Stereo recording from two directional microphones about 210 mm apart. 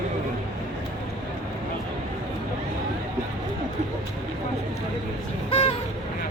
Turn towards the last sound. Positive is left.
turn(degrees=25)  # may be behind; listen again after turning